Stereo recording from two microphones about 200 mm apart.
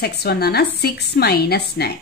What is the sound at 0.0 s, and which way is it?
A woman's voice, 55° left (ahead or behind).